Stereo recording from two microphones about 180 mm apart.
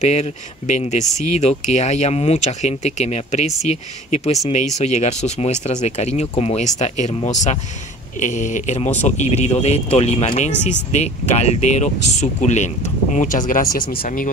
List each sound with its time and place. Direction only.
0.0 s speech: 40° left (ahead or behind)